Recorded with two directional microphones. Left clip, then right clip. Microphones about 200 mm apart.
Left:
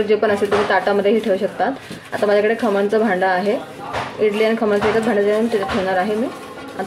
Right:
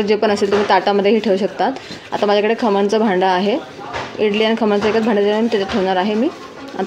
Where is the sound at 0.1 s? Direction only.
35° right (ahead or behind).